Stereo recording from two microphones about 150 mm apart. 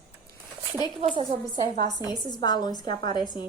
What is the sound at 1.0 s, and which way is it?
Speech, 40° right (ahead or behind).